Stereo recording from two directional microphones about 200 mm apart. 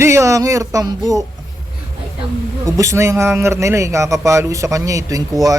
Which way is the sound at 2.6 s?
15° right (ahead or behind).